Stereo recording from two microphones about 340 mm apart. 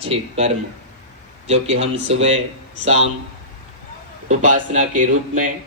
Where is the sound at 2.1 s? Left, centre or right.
Centre.